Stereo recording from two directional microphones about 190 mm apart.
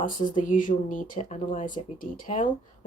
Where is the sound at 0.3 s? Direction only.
45° left (ahead or behind).